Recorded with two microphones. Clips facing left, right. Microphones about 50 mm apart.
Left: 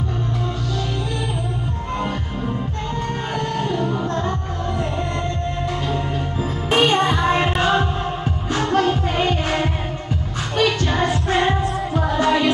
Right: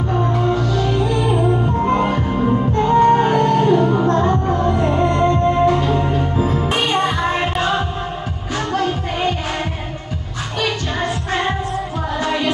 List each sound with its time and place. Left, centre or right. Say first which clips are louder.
1.4 s music: right 10 dB; right
7.0 s music: even; centre